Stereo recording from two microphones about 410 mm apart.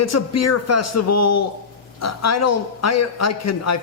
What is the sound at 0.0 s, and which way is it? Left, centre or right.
A man's voice, left.